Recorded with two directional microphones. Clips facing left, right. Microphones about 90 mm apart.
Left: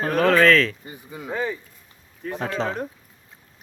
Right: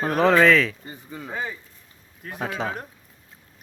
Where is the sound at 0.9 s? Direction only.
15° left (ahead or behind).